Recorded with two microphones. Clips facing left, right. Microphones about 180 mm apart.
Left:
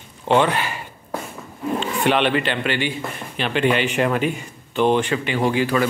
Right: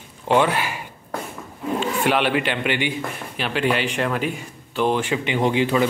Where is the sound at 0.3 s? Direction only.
10° right (ahead or behind).